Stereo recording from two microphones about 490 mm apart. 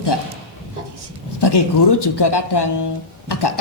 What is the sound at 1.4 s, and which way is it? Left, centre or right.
A woman's voice, left.